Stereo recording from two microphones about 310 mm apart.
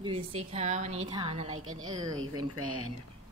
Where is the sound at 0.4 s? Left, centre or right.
Right.